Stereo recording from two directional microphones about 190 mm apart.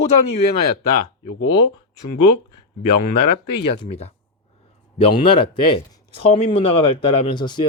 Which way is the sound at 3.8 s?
30° left (ahead or behind).